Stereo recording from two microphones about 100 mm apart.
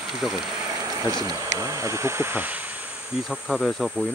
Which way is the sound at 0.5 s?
40° right (ahead or behind).